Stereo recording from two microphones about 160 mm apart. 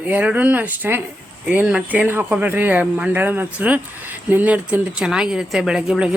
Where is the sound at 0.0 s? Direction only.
10° right (ahead or behind).